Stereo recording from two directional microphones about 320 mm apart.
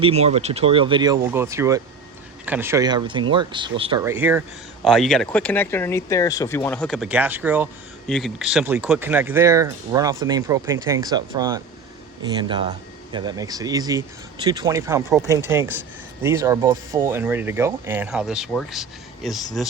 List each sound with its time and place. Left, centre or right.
0.0 s speech: centre